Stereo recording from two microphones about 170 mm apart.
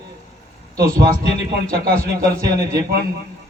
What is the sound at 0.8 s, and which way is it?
A man's voice, 60° right (ahead or behind).